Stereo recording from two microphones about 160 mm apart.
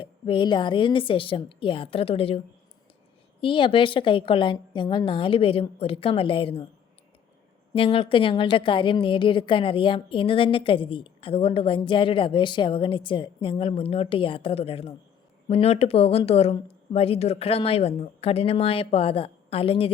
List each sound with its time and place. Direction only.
0.0 s a woman's voice: 30° left (ahead or behind)
3.4 s a woman's voice: 30° left (ahead or behind)
7.7 s a woman's voice: 35° left (ahead or behind)